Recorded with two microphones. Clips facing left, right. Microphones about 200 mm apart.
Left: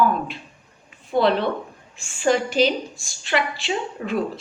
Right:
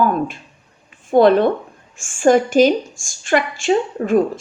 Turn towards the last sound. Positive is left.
turn(degrees=-50)  # may be behind; listen again after turning